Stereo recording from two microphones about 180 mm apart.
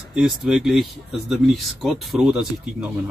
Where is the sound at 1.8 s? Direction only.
5° right (ahead or behind).